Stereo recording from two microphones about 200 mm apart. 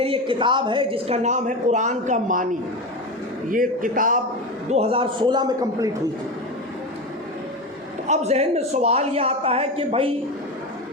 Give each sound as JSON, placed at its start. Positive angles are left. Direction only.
{"t": 0.0, "sound": "a man's voice", "side_deg": -25}
{"t": 3.5, "sound": "a man's voice", "side_deg": -45}
{"t": 4.7, "sound": "a man's voice", "side_deg": -30}
{"t": 8.0, "sound": "a man's voice", "side_deg": -35}